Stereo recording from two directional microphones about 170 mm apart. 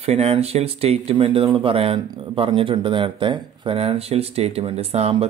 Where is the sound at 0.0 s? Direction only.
40° right (ahead or behind).